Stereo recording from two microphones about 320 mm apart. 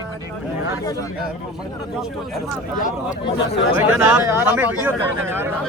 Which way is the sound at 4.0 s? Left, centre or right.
Centre.